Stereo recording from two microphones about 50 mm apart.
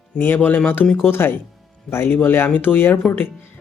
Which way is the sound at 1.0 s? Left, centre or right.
Left.